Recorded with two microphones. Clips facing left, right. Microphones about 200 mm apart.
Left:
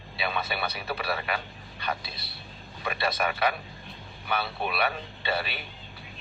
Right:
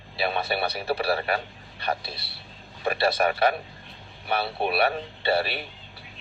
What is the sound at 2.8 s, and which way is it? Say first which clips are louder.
Speech: right 6 dB; 35° right (ahead or behind).